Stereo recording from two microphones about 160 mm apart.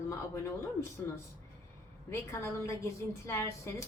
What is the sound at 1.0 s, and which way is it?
Speech, 10° left (ahead or behind).